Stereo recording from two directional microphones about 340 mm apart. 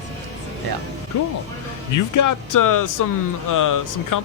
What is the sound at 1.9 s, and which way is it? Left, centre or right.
Speech, left.